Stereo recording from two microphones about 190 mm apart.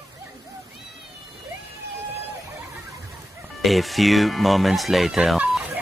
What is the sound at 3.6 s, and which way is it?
Speech, centre (ahead or behind).